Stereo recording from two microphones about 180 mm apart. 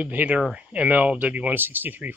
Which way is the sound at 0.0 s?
10° right (ahead or behind).